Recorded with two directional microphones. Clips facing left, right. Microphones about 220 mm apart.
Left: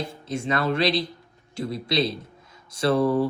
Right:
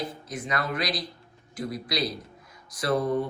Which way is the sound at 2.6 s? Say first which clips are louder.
Left 5 dB; 25° left (ahead or behind).